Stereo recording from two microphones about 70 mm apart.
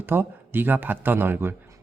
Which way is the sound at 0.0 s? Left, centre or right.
Right.